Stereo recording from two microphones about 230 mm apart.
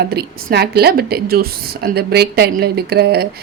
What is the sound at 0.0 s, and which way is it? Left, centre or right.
A woman's voice, right.